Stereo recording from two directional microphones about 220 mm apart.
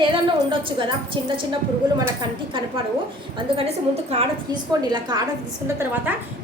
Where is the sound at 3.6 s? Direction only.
25° right (ahead or behind).